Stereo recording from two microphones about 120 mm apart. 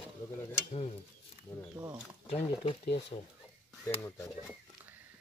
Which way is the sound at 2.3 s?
55° left (ahead or behind).